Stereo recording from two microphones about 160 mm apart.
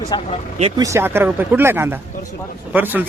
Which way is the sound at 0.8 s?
20° right (ahead or behind).